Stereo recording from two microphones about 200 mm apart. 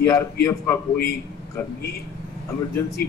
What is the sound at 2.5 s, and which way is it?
Speech, 15° left (ahead or behind).